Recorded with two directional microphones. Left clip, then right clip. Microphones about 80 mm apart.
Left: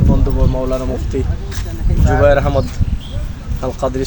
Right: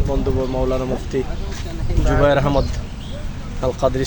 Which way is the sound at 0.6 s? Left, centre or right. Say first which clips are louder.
Left 1 dB; right.